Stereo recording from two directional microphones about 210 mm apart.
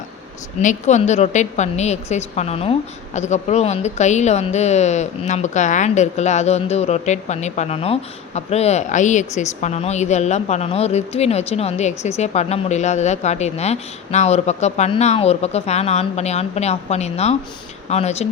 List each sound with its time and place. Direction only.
0.6 s a woman's voice: 35° left (ahead or behind)